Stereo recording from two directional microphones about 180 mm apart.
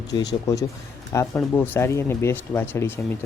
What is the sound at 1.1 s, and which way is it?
Speech, 15° left (ahead or behind).